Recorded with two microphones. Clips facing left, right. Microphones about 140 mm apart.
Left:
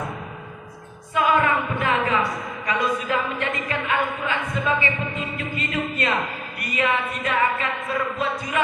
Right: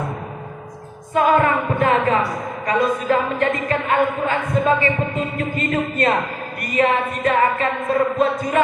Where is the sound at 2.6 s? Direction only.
45° right (ahead or behind).